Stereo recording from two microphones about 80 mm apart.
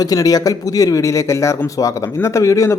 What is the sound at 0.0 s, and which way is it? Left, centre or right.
Speech, left.